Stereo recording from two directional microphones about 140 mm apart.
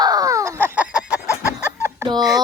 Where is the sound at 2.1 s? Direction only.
25° right (ahead or behind).